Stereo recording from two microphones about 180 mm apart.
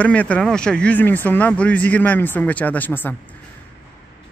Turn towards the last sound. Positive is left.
turn(degrees=10)  # may be behind; listen again after turning